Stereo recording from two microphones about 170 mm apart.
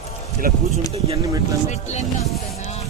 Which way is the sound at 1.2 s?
20° right (ahead or behind).